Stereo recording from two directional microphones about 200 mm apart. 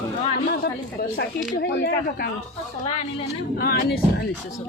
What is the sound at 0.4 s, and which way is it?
Speech, 50° left (ahead or behind).